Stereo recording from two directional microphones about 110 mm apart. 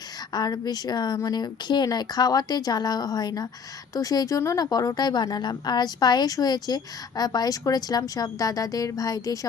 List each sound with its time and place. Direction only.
0.3 s a woman's voice: 40° left (ahead or behind)